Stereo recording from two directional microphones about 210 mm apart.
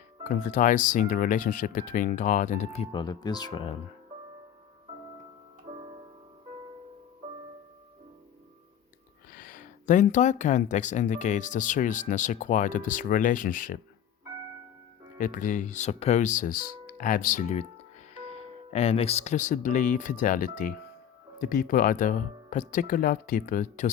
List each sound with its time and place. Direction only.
0.3 s speech: 35° left (ahead or behind)
5.7 s music: 30° right (ahead or behind)
9.3 s speech: 40° left (ahead or behind)
15.2 s speech: 40° left (ahead or behind)